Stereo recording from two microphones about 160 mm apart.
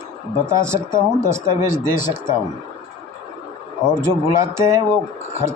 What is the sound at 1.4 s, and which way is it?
Speech, 15° right (ahead or behind).